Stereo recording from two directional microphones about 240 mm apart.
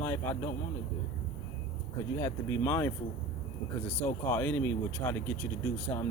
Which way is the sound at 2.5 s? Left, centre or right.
Centre.